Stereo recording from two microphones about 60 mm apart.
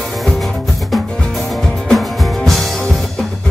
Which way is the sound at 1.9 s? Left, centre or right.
Centre.